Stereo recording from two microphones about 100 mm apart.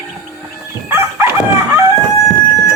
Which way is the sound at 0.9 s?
25° right (ahead or behind).